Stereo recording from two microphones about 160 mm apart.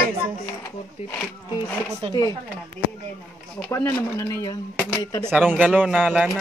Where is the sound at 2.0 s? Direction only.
35° right (ahead or behind).